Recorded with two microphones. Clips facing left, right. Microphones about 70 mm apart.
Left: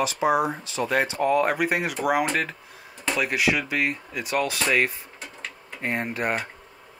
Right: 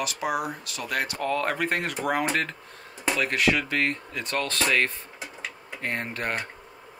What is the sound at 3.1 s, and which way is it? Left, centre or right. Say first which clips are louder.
Speech: left 1 dB; centre.